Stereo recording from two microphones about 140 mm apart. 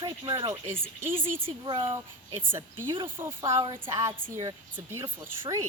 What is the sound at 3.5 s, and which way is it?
A woman's voice, 30° right (ahead or behind).